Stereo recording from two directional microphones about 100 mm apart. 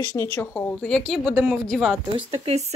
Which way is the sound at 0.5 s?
10° left (ahead or behind).